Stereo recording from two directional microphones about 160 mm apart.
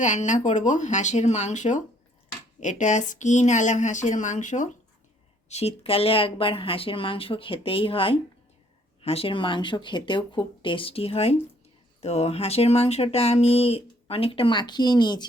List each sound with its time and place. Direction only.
0.0 s speech: 50° left (ahead or behind); by 15.3 s 25° left (ahead or behind)